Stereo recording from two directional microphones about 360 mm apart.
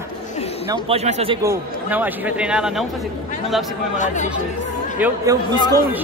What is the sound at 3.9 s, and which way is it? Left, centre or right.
Speech, centre.